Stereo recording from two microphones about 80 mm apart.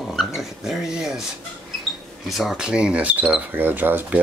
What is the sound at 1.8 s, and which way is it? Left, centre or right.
Speech, centre.